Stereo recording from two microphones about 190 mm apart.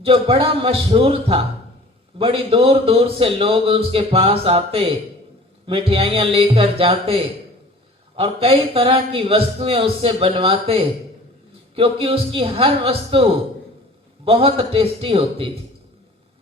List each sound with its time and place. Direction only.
0.0 s a man's voice: 30° right (ahead or behind)
14.3 s a man's voice: 30° right (ahead or behind)